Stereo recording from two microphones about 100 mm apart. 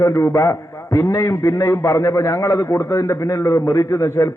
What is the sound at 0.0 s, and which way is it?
A man's voice, 30° left (ahead or behind).